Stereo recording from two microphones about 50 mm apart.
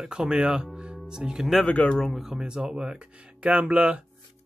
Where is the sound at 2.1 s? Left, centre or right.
Centre.